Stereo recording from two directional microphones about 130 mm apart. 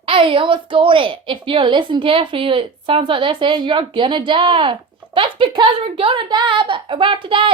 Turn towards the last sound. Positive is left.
turn(degrees=-40)  # may be behind; listen again after turning